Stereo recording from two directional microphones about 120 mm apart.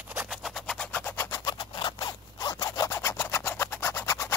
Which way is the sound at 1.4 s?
40° left (ahead or behind).